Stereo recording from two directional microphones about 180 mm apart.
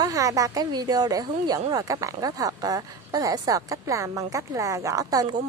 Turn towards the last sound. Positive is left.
turn(degrees=-20)  # may be behind; listen again after turning